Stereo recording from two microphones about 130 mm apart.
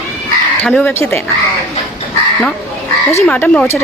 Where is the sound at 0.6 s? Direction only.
10° left (ahead or behind).